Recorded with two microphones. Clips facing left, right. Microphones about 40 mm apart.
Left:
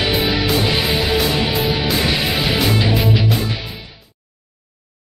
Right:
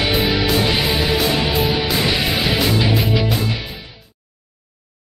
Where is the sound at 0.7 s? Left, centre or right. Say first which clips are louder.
Even; centre.